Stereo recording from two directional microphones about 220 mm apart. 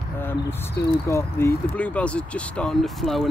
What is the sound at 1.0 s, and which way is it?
Speech, 15° left (ahead or behind).